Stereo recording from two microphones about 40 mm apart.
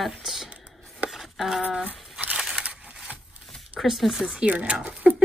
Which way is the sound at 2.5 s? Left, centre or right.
Right.